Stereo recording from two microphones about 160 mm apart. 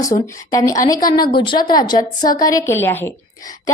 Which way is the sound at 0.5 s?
20° left (ahead or behind).